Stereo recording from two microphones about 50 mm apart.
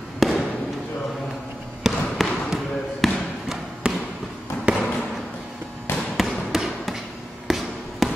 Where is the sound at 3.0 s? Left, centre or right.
Centre.